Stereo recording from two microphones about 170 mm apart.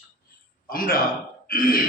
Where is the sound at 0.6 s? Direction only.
55° left (ahead or behind).